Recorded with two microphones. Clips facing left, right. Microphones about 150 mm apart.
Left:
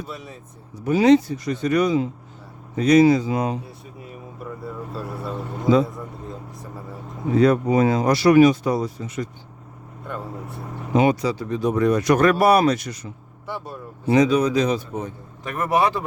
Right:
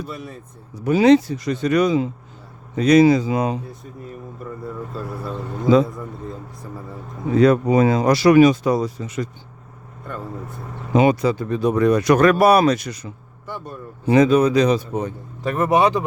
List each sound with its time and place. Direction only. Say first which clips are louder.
0.1 s speech: right 3 dB; centre (ahead or behind)
0.9 s speech: right 2 dB; 85° right
4.9 s speech: even; centre (ahead or behind)
7.3 s speech: right 2 dB; 90° right
10.9 s speech: right 3 dB; 80° right
14.1 s speech: right 3 dB; 55° right (ahead or behind); by 15.1 s 75° right (ahead or behind)
15.4 s a man's voice: right 4 dB; 25° right (ahead or behind)